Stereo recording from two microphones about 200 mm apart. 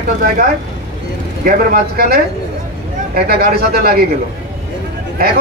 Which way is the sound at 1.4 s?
50° right (ahead or behind).